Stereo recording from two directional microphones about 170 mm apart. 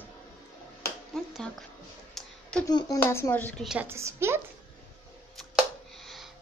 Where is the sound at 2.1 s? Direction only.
5° left (ahead or behind).